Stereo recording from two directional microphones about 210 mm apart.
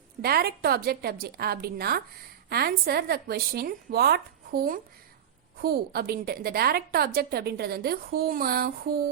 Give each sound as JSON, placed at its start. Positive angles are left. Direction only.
{"t": 0.2, "sound": "a woman's voice", "side_deg": -50}